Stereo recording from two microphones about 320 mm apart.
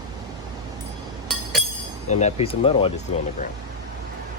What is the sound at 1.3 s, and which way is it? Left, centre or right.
Chink, centre.